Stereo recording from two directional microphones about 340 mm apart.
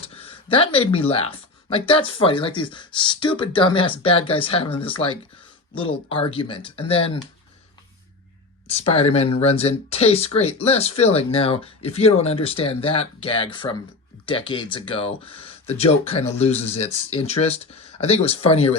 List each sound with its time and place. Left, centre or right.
0.0 s speech: centre
8.6 s speech: centre